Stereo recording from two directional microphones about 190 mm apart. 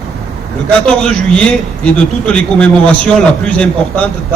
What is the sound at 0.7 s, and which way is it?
A man's voice, 5° left (ahead or behind).